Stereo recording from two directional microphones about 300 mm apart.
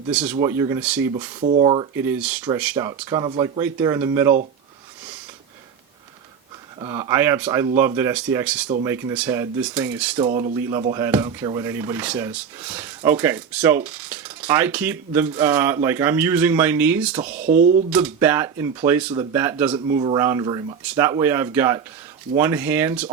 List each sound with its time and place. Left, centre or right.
0.1 s speech: centre
0.3 s cutlery: centre
1.4 s cutlery: right
6.7 s cutlery: centre
10.2 s cutlery: centre
17.4 s speech: right
17.9 s cutlery: centre